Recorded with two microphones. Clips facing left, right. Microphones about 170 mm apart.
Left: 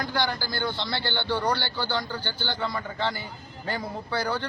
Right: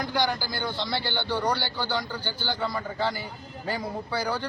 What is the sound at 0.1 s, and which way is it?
A man's voice, 15° right (ahead or behind).